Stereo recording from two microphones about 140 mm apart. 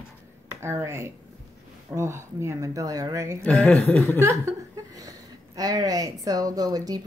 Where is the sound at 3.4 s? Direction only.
10° left (ahead or behind).